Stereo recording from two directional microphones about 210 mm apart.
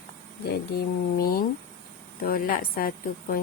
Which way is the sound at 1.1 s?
45° left (ahead or behind).